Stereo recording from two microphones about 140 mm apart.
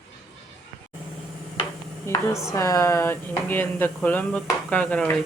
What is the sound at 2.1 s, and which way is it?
Speech, 20° left (ahead or behind).